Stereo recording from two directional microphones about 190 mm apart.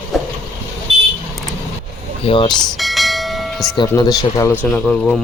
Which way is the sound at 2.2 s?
25° left (ahead or behind).